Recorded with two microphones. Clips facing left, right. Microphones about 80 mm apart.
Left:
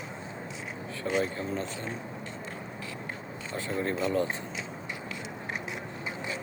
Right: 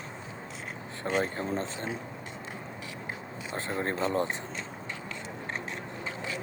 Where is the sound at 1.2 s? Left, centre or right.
Right.